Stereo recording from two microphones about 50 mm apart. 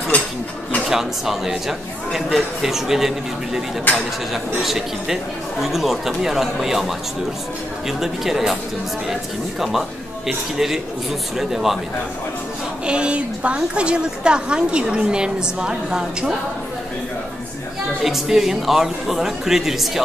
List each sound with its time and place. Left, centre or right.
0.8 s a woman's voice: centre
3.9 s speech: left
4.6 s speech: centre
8.0 s a woman's voice: centre
9.6 s a woman's voice: centre
12.8 s a woman's voice: centre
18.0 s a woman's voice: centre